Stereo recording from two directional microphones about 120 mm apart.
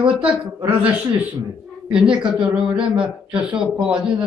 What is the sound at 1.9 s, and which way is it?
Speech, 5° right (ahead or behind).